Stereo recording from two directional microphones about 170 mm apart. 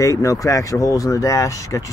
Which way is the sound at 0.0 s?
20° left (ahead or behind).